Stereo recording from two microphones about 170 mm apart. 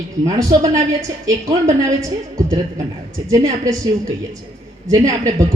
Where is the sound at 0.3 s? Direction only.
20° right (ahead or behind).